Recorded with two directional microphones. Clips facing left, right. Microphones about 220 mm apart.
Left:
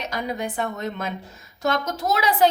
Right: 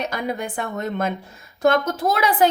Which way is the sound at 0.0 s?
50° right (ahead or behind).